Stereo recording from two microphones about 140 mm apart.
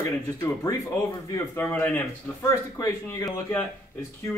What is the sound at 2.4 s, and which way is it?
Speech, 25° left (ahead or behind).